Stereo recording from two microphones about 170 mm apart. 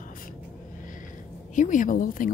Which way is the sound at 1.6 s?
50° left (ahead or behind).